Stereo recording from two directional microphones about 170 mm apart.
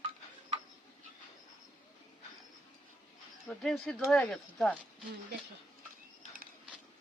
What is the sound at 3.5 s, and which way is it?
Speech, centre (ahead or behind).